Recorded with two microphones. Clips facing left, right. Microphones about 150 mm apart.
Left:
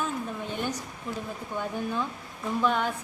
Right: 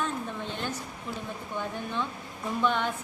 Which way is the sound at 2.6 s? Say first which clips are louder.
Left 1 dB; 5° left (ahead or behind).